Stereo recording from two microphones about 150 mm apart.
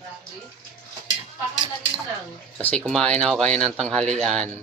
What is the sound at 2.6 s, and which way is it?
Speech, 5° left (ahead or behind).